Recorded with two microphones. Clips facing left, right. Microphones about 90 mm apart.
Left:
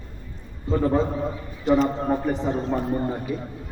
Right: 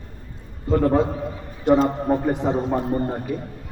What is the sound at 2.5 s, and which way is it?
Speech, 60° right (ahead or behind).